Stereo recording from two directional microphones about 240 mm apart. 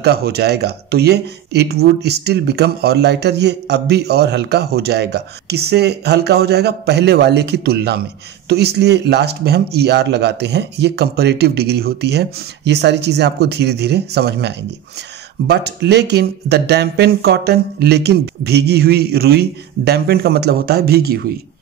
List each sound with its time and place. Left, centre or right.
0.0 s speech: right